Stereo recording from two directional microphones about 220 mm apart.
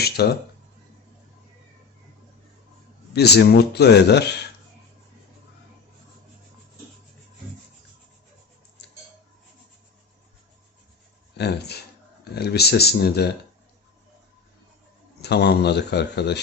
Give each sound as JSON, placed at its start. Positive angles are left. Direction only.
{"t": 0.0, "sound": "speech", "side_deg": 45}
{"t": 3.1, "sound": "speech", "side_deg": 50}
{"t": 11.3, "sound": "speech", "side_deg": 50}
{"t": 15.2, "sound": "speech", "side_deg": 50}